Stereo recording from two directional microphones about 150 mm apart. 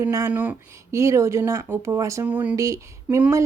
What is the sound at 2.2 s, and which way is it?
Speech, 10° right (ahead or behind).